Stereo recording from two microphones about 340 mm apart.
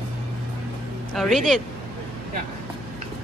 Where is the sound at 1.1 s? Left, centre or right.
Centre.